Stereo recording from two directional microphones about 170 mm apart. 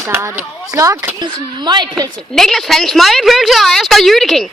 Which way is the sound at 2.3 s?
Centre (ahead or behind).